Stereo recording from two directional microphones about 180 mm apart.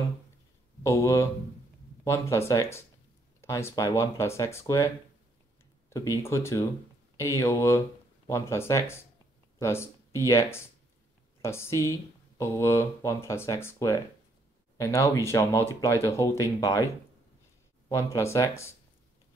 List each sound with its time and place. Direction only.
0.8 s speech: 15° left (ahead or behind)
17.8 s speech: 15° left (ahead or behind)